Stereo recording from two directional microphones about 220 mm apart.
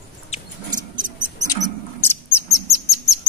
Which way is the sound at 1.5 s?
10° left (ahead or behind).